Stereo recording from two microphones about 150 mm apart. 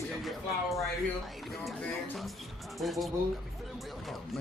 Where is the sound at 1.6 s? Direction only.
Centre (ahead or behind).